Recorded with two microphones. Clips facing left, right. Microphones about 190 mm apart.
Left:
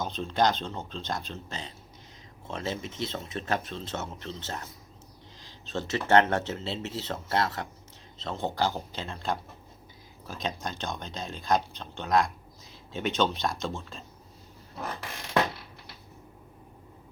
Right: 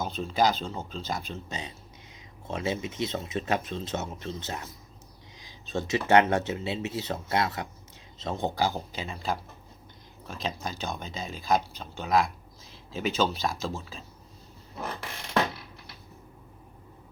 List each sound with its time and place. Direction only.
0.0 s speech: 5° right (ahead or behind)